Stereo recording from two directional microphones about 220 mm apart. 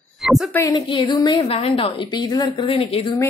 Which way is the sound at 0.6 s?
20° left (ahead or behind).